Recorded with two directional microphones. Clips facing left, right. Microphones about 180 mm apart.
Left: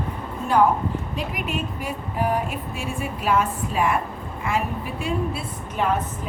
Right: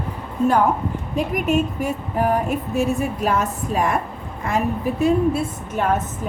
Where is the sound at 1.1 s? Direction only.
45° right (ahead or behind).